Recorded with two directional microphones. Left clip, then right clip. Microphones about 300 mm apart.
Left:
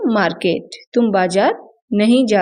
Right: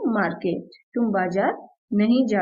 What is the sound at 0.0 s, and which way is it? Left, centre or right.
A woman's voice, left.